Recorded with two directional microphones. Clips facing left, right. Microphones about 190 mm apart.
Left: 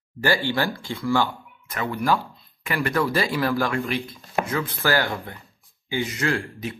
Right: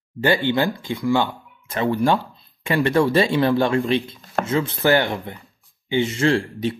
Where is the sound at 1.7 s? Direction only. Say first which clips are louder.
Right 4 dB; 30° right (ahead or behind).